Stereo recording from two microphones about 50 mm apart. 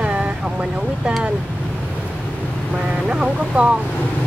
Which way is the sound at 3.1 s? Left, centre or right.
Centre.